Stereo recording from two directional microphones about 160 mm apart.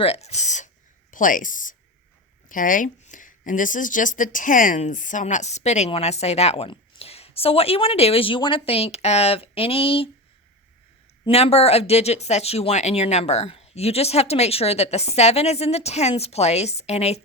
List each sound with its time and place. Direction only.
0.0 s speech: 40° left (ahead or behind)
11.3 s speech: 40° left (ahead or behind)